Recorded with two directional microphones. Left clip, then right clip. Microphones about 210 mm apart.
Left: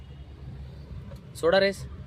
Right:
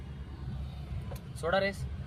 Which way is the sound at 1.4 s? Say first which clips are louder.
Left 8 dB; 50° left (ahead or behind).